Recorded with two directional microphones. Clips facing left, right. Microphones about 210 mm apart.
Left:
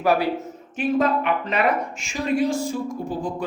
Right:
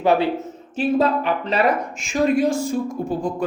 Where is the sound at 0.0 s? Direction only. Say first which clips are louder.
Right 2 dB; 25° right (ahead or behind).